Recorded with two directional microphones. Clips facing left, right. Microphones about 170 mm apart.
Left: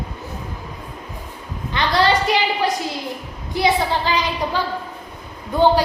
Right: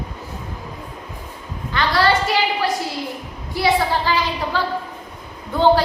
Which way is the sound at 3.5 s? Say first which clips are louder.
Even; 20° left (ahead or behind).